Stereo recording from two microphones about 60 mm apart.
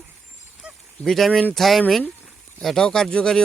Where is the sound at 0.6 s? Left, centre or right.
Centre.